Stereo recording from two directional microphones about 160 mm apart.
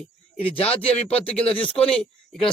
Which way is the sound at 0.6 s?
5° left (ahead or behind).